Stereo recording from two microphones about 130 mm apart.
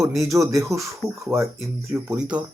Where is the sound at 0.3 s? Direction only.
25° right (ahead or behind).